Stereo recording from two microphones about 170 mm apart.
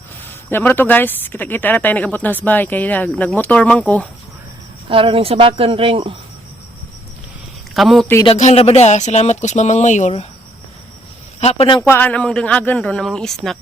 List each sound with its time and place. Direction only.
0.5 s speech: 10° left (ahead or behind)
4.9 s speech: 30° right (ahead or behind)
7.7 s a man's voice: centre (ahead or behind)
8.4 s speech: 40° left (ahead or behind)
11.3 s speech: 40° left (ahead or behind)
11.8 s speech: 10° left (ahead or behind)